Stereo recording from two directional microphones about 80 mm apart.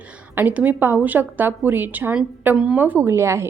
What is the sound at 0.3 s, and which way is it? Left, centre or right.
A woman's voice, centre.